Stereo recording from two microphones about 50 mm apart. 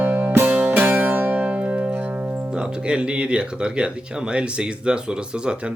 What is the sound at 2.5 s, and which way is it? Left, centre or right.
Speech, centre.